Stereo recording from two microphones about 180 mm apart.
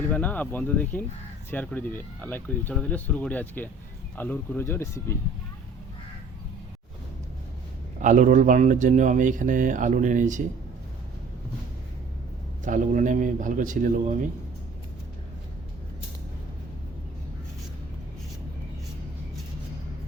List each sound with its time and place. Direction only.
0.1 s speech: 10° left (ahead or behind)
7.9 s speech: 45° right (ahead or behind)
12.6 s speech: 45° right (ahead or behind)